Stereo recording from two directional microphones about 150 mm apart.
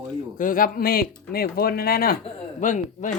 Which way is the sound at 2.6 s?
60° left (ahead or behind).